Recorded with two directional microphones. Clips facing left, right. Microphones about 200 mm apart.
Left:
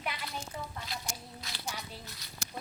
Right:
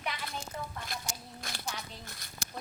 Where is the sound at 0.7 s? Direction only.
50° right (ahead or behind).